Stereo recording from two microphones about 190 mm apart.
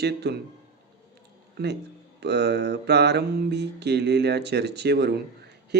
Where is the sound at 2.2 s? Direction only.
60° right (ahead or behind).